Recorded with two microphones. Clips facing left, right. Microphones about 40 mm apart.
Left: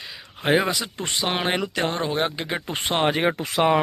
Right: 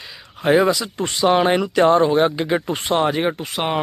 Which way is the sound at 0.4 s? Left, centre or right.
Centre.